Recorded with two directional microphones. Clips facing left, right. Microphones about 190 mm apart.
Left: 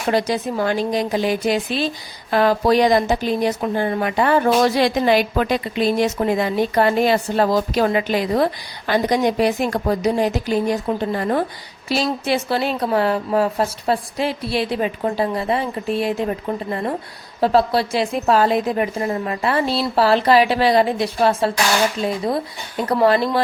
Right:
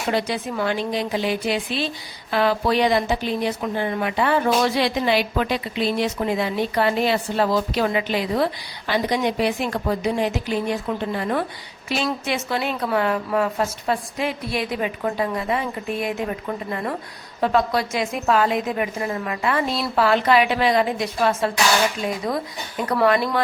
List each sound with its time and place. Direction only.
0.1 s a woman's voice: 40° left (ahead or behind)